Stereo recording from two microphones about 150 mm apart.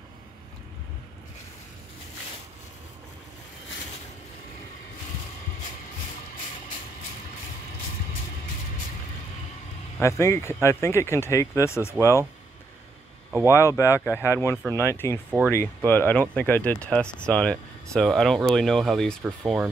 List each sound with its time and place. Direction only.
9.9 s speech: 20° left (ahead or behind)
13.5 s speech: 20° left (ahead or behind); by 19.7 s centre (ahead or behind)